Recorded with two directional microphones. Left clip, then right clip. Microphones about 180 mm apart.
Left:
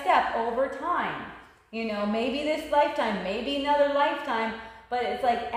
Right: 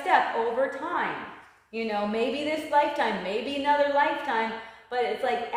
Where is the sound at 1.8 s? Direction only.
15° right (ahead or behind).